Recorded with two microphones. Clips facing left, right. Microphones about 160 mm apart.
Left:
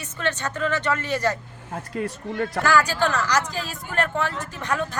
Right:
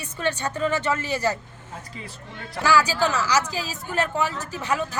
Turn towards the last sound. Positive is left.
turn(degrees=-5)  # may be behind; listen again after turning